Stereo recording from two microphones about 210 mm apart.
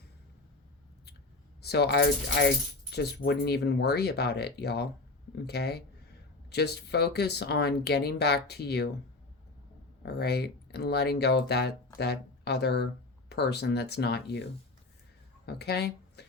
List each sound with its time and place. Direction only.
1.6 s speech: 50° left (ahead or behind)
10.0 s speech: 50° left (ahead or behind)
15.4 s speech: 50° left (ahead or behind)